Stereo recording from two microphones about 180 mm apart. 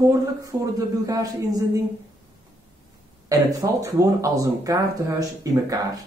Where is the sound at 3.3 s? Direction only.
20° right (ahead or behind).